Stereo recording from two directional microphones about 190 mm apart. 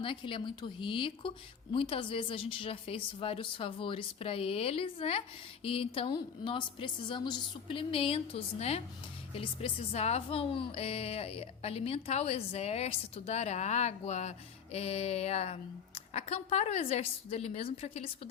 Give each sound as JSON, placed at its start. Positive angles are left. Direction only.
{"t": 0.0, "sound": "a woman's voice", "side_deg": 25}